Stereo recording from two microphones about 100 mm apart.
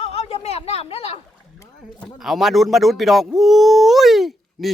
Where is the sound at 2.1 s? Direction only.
5° right (ahead or behind).